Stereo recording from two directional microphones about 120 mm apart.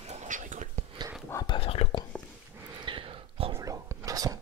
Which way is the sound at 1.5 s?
50° left (ahead or behind).